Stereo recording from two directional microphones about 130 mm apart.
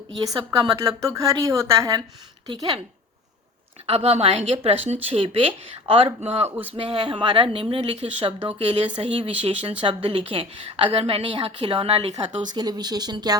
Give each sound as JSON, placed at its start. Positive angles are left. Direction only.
{"t": 0.3, "sound": "a woman's voice", "side_deg": -35}
{"t": 2.5, "sound": "a woman's voice", "side_deg": -40}
{"t": 3.8, "sound": "speech", "side_deg": -50}
{"t": 6.5, "sound": "speech", "side_deg": -15}
{"t": 6.7, "sound": "a woman's voice", "side_deg": -40}
{"t": 12.5, "sound": "a woman's voice", "side_deg": -30}